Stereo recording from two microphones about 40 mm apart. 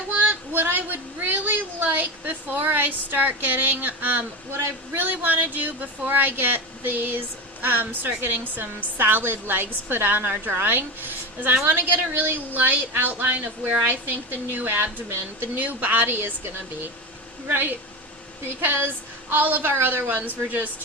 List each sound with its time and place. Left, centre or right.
0.1 s speech: right
11.6 s a woman's voice: right
17.5 s a woman's voice: right
19.7 s speech: right